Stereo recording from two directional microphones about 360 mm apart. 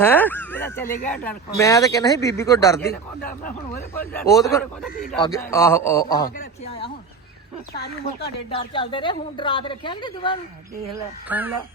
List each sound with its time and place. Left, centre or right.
0.0 s a man's voice: centre
3.2 s speech: left
4.2 s a man's voice: centre
8.4 s a man's voice: centre
11.3 s speech: centre